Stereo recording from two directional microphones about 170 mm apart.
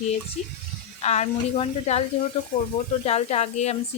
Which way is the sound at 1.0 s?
40° left (ahead or behind).